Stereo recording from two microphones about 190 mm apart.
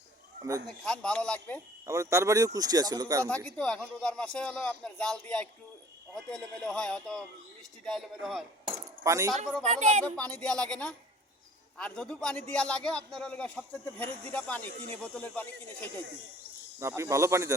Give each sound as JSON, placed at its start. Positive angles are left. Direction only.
{"t": 0.9, "sound": "a man's voice", "side_deg": 5}
{"t": 1.9, "sound": "speech", "side_deg": -15}
{"t": 3.2, "sound": "a man's voice", "side_deg": 5}
{"t": 8.7, "sound": "cutlery", "side_deg": -15}
{"t": 9.7, "sound": "speech", "side_deg": -40}
{"t": 10.0, "sound": "a man's voice", "side_deg": 5}
{"t": 16.8, "sound": "speech", "side_deg": -15}